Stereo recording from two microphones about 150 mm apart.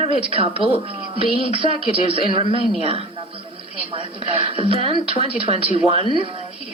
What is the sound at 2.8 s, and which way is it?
Speech, 40° right (ahead or behind).